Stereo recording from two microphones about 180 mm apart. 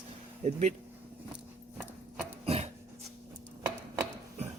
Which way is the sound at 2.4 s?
35° right (ahead or behind).